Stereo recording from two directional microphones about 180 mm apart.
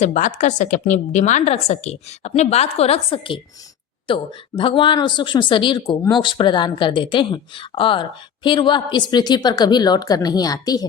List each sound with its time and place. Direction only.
0.0 s a woman's voice: 40° left (ahead or behind); by 10.8 s 20° left (ahead or behind)